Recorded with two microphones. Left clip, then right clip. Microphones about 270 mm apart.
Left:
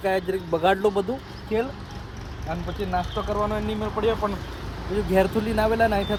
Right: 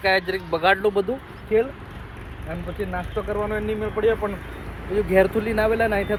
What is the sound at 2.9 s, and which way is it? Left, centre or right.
Speech, centre.